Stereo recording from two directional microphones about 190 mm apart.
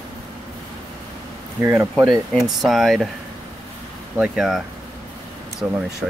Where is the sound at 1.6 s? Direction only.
10° right (ahead or behind).